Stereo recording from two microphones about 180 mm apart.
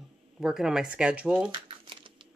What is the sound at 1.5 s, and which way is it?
Speech, 25° right (ahead or behind).